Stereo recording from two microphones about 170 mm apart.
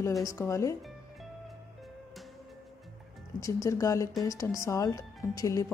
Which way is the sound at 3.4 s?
20° left (ahead or behind).